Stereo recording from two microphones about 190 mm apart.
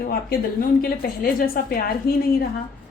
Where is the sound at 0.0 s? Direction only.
55° left (ahead or behind).